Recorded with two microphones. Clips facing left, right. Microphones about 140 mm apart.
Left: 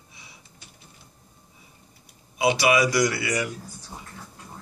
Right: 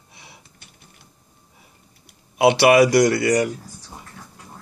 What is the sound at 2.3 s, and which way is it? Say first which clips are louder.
Speech: right 7 dB; 65° right (ahead or behind).